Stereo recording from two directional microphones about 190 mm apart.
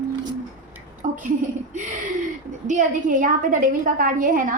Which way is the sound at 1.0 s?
40° right (ahead or behind).